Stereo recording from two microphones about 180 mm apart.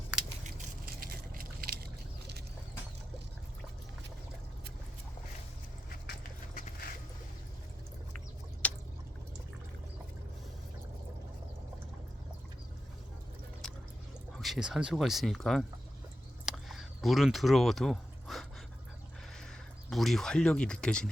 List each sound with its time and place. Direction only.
0.4 s a sound: 55° right (ahead or behind)
6.1 s clip-clop: 45° left (ahead or behind)
8.6 s drip: 5° left (ahead or behind)
13.6 s pour: centre (ahead or behind)
14.3 s speech: centre (ahead or behind)
16.5 s a sound: centre (ahead or behind)
19.4 s speech: centre (ahead or behind)